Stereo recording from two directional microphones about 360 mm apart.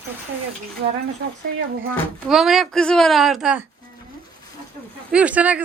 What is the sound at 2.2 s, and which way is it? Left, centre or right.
Speech, centre.